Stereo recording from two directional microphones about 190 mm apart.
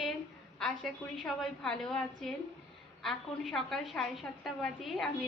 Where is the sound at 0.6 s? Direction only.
5° left (ahead or behind).